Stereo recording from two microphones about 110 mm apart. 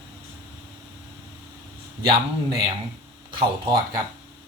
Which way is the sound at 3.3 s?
45° right (ahead or behind).